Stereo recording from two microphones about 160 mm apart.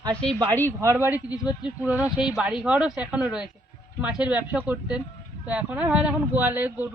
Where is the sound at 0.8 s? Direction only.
15° right (ahead or behind).